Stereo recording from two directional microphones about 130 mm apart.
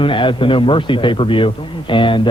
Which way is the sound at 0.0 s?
40° left (ahead or behind).